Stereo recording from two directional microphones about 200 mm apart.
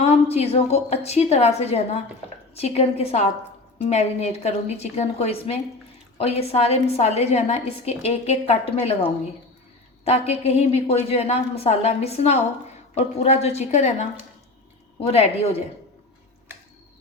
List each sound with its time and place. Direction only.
0.0 s a woman's voice: 30° left (ahead or behind)
10.0 s a woman's voice: 30° left (ahead or behind)